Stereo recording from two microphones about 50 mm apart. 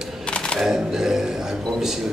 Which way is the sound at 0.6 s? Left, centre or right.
Centre.